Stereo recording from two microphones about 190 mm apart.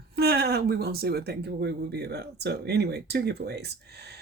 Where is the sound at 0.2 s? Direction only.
55° right (ahead or behind).